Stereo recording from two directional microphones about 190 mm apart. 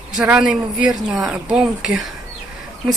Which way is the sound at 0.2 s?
5° right (ahead or behind).